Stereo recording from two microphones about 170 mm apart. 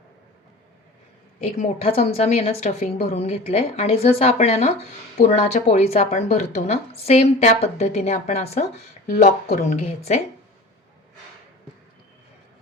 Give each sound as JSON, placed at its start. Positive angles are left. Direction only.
{"t": 1.5, "sound": "a woman's voice", "side_deg": 40}